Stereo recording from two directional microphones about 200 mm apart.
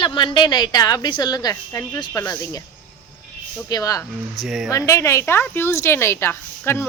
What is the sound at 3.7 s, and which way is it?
Speech, 15° left (ahead or behind).